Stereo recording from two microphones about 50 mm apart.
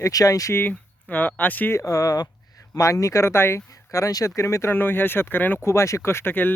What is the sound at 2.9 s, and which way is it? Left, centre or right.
Speech, left.